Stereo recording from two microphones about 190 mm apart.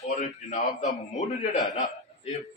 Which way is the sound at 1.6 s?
20° left (ahead or behind).